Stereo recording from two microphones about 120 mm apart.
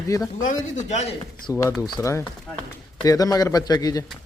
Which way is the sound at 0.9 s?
65° left (ahead or behind).